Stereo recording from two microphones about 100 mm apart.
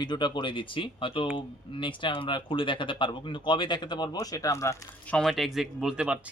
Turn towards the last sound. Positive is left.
turn(degrees=-10)  # may be behind; listen again after turning